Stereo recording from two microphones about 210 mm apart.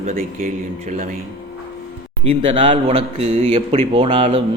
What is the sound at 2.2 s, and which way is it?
A man's voice, 30° right (ahead or behind).